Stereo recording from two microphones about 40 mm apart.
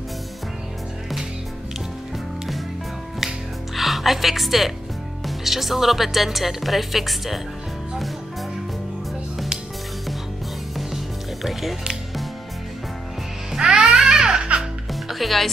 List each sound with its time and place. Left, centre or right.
3.7 s a woman's voice: centre
13.6 s music: centre
13.8 s baby cry: centre
14.9 s music: centre